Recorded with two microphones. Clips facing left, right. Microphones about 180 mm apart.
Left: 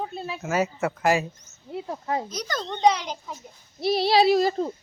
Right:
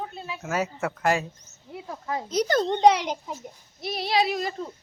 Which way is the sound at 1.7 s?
25° left (ahead or behind).